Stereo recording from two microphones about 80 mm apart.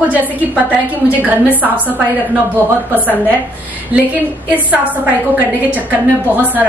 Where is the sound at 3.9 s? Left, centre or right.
Right.